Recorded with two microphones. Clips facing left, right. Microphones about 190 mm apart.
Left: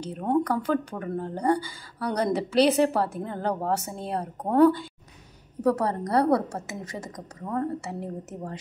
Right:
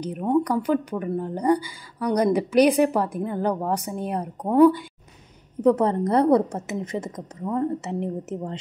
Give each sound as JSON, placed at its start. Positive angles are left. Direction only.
{"t": 0.0, "sound": "a woman's voice", "side_deg": -15}